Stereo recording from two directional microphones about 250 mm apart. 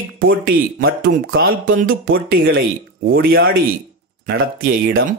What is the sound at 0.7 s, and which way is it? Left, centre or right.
Speech, right.